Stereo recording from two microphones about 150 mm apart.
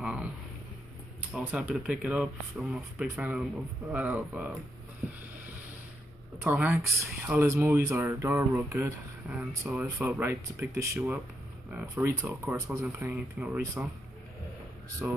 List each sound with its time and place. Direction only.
0.0 s a sound: 5° right (ahead or behind)
1.3 s speech: 10° right (ahead or behind)
6.4 s speech: 10° right (ahead or behind)
15.0 s speech: 5° right (ahead or behind)